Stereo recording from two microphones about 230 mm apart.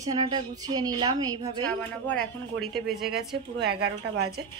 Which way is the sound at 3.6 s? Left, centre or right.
Right.